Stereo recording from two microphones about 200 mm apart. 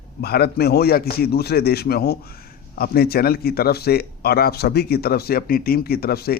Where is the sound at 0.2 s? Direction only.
50° left (ahead or behind).